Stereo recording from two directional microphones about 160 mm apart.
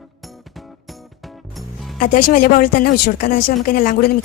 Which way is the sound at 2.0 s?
60° left (ahead or behind).